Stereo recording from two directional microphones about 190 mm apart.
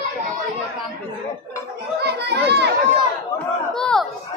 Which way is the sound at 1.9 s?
60° right (ahead or behind).